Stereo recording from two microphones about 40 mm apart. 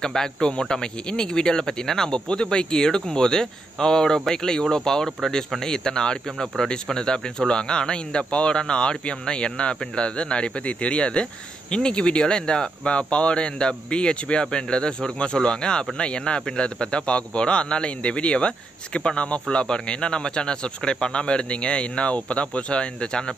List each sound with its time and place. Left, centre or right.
0.0 s speech: centre